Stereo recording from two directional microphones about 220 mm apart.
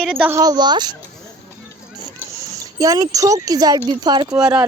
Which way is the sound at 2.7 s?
15° right (ahead or behind).